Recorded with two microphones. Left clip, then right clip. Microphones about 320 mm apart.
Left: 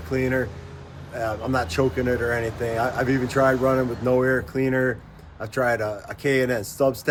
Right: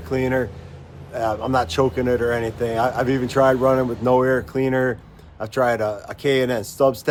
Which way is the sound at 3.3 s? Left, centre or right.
Centre.